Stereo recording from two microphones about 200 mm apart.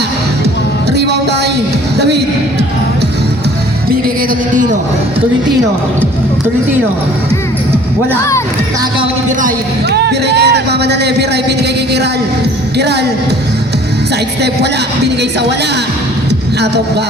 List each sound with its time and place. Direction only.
0.9 s a sound: 55° right (ahead or behind)
2.0 s a man's voice: 55° right (ahead or behind)
9.9 s a man's voice: 55° right (ahead or behind)
12.7 s a man's voice: 55° right (ahead or behind)